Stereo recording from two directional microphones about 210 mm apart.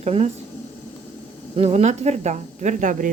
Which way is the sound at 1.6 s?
30° right (ahead or behind).